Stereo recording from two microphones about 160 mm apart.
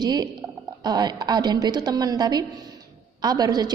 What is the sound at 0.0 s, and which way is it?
A woman's voice, 25° right (ahead or behind).